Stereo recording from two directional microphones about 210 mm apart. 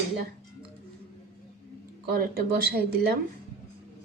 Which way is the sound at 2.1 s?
45° right (ahead or behind).